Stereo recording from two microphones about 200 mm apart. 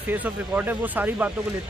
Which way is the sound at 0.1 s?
10° right (ahead or behind).